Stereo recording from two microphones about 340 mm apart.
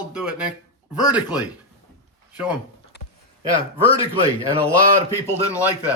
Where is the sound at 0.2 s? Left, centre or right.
Centre.